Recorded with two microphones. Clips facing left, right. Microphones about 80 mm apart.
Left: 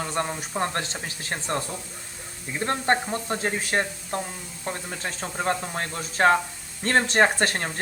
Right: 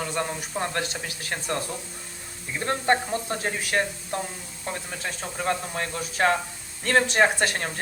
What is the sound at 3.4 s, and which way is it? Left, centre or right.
Speech, left.